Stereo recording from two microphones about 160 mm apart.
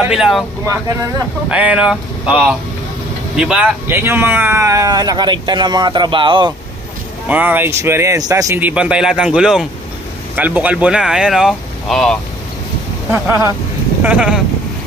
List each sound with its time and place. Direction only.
0.0 s speech: 5° right (ahead or behind)
1.5 s speech: 5° right (ahead or behind); by 6.5 s 30° right (ahead or behind)
7.2 s speech: 10° right (ahead or behind)
8.5 s speech: 10° right (ahead or behind)
13.1 s speech: 15° right (ahead or behind)